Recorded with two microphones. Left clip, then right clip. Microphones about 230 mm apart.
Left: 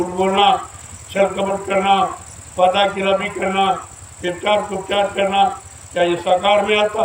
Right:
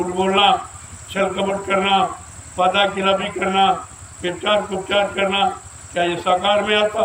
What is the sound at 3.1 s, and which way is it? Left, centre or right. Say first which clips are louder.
Speech: left 1 dB; left.